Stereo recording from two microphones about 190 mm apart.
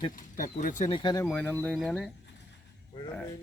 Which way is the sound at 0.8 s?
25° left (ahead or behind).